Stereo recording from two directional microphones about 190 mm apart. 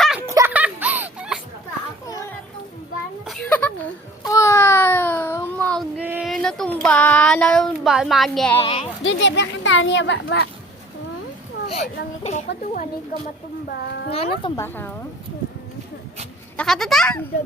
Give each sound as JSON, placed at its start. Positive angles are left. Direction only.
{"t": 0.0, "sound": "a sound", "side_deg": -5}
{"t": 0.3, "sound": "music", "side_deg": -15}
{"t": 2.0, "sound": "a sound", "side_deg": 20}
{"t": 3.2, "sound": "a sound", "side_deg": 5}
{"t": 4.2, "sound": "a sound", "side_deg": 15}
{"t": 6.0, "sound": "child singing", "side_deg": -5}
{"t": 8.5, "sound": "a woman's voice", "side_deg": 30}
{"t": 9.0, "sound": "speech", "side_deg": 70}
{"t": 12.2, "sound": "speech", "side_deg": 35}
{"t": 13.7, "sound": "a child's voice", "side_deg": 60}
{"t": 14.1, "sound": "speech", "side_deg": 30}
{"t": 14.5, "sound": "speech", "side_deg": 10}
{"t": 16.6, "sound": "speech", "side_deg": 0}